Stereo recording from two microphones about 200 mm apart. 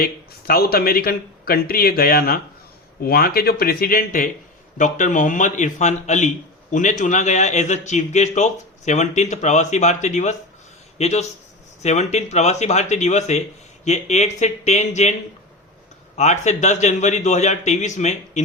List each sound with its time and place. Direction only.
0.0 s speech: 50° left (ahead or behind)
16.1 s speech: 35° left (ahead or behind)